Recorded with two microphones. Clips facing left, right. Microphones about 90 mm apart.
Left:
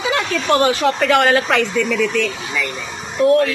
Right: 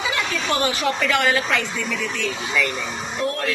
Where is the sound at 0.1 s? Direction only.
55° left (ahead or behind).